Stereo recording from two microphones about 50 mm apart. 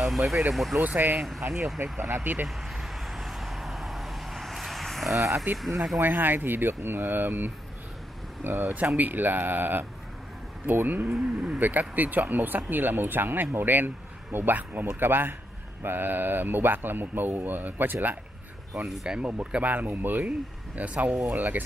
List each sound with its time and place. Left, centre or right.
0.0 s speech: centre
0.7 s a man's voice: right
2.4 s vehicle: centre
5.1 s speech: right
5.6 s speech: centre
6.0 s speech: right
8.7 s a man's voice: right
11.1 s speech: centre
11.8 s a man's voice: right
18.9 s a man's voice: centre; by 20.2 s right
20.2 s a man's voice: right